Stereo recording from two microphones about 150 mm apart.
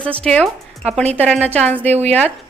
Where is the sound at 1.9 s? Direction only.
45° right (ahead or behind).